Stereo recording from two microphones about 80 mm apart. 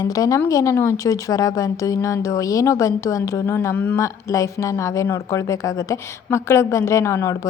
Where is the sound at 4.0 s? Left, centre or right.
Left.